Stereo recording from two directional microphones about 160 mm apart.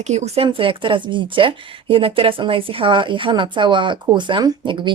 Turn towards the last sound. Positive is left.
turn(degrees=-30)  # may be behind; listen again after turning